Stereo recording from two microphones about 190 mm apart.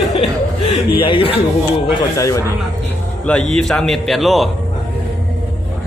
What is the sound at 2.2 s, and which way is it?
Speech, 15° left (ahead or behind).